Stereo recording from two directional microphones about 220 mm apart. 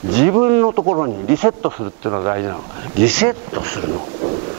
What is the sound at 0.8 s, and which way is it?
Speech, 25° right (ahead or behind).